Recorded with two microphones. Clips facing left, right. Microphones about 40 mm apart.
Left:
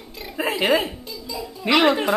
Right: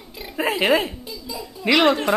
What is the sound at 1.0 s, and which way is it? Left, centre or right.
Giggle, centre.